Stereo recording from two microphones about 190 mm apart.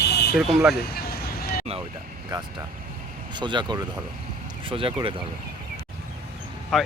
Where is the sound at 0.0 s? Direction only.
60° left (ahead or behind).